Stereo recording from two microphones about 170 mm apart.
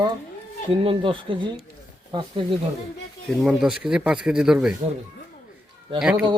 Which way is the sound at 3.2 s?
Centre (ahead or behind).